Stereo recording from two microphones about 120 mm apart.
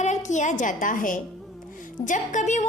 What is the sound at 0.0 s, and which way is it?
A woman's voice, 85° left.